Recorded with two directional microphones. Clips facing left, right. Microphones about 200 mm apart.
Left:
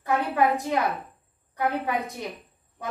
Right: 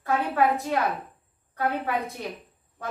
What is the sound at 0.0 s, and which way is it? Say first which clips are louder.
A woman's voice: even; 15° left (ahead or behind).